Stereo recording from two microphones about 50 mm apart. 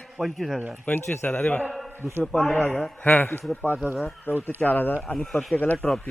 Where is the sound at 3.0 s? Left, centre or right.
Left.